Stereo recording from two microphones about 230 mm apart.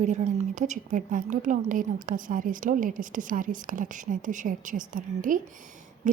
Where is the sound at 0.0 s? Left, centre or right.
Right.